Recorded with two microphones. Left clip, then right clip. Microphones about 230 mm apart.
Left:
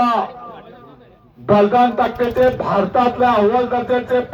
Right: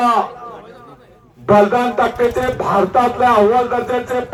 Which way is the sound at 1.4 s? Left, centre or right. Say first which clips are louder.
Right 1 dB; right.